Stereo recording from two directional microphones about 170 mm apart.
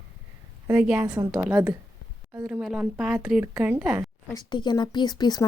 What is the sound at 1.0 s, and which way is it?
Speech, 25° right (ahead or behind).